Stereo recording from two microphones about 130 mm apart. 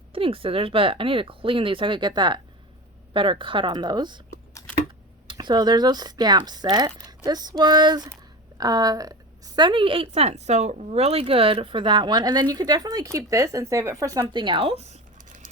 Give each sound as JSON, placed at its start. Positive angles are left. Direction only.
{"t": 0.1, "sound": "a woman's voice", "side_deg": -45}
{"t": 5.3, "sound": "a woman's voice", "side_deg": -35}
{"t": 14.3, "sound": "a woman's voice", "side_deg": -40}